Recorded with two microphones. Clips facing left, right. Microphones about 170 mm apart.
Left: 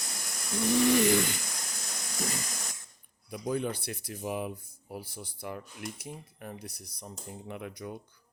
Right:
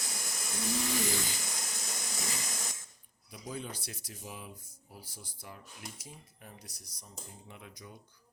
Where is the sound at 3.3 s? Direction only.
60° left (ahead or behind).